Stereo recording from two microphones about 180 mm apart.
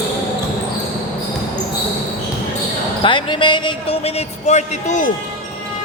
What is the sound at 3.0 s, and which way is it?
Speech, 25° left (ahead or behind).